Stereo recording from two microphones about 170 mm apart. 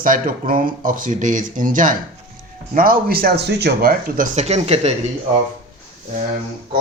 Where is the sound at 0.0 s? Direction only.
55° right (ahead or behind).